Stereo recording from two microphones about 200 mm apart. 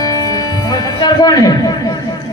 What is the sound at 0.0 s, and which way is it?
Music, 20° left (ahead or behind).